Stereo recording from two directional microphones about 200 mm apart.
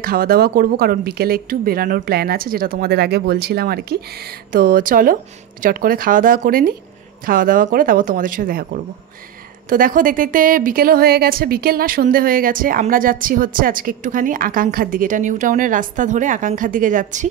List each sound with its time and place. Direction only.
0.0 s a woman's voice: 45° right (ahead or behind)
9.7 s a woman's voice: 45° right (ahead or behind)